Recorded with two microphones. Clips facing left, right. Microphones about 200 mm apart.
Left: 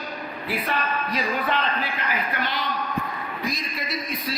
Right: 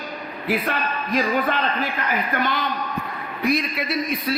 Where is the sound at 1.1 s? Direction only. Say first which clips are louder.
Right 6 dB; 45° right (ahead or behind).